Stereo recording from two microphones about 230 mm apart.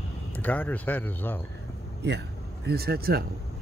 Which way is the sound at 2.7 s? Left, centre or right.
Right.